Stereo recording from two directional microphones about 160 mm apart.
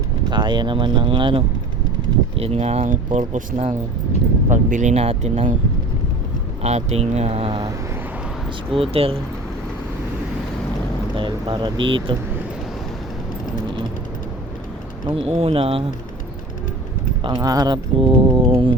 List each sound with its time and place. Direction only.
0.3 s speech: 30° right (ahead or behind); by 5.5 s 45° right (ahead or behind)
6.6 s speech: 45° right (ahead or behind)
8.7 s speech: 35° right (ahead or behind)
11.2 s speech: 30° right (ahead or behind)
15.3 s speech: 40° right (ahead or behind)
17.2 s speech: 25° right (ahead or behind)